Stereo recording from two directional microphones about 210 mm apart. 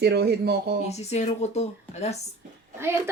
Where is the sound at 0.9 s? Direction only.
30° left (ahead or behind).